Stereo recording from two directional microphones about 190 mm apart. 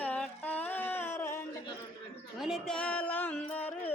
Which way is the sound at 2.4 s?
Centre (ahead or behind).